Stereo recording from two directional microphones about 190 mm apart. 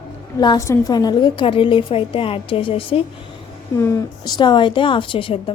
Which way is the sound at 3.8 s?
15° left (ahead or behind).